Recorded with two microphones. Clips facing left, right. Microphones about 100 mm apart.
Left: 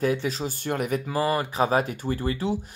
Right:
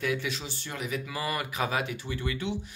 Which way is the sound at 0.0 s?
40° left (ahead or behind).